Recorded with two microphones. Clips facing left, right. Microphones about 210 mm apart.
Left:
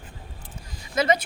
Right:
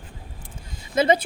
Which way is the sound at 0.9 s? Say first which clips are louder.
Right 3 dB; 30° right (ahead or behind).